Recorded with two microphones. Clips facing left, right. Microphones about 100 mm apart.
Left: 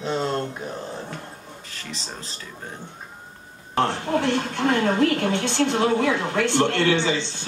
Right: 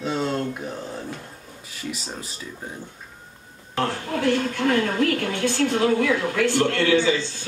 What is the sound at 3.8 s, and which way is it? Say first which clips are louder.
A woman's voice: left 3 dB; 25° left (ahead or behind).